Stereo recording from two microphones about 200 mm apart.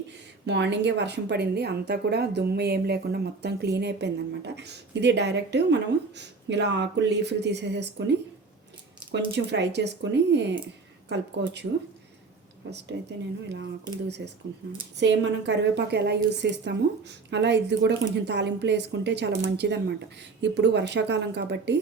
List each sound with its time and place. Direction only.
0.4 s a woman's voice: 60° right (ahead or behind)
9.1 s a woman's voice: 60° right (ahead or behind)
12.7 s a woman's voice: 60° right (ahead or behind)